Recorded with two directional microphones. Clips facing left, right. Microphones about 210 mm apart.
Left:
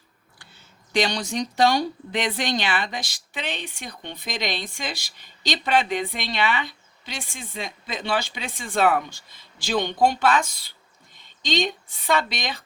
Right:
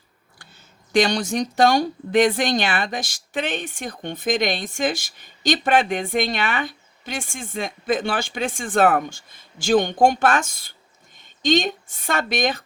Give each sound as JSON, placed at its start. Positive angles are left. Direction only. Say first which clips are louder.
{"t": 0.9, "sound": "speech", "louder": "right 4 dB", "side_deg": -50}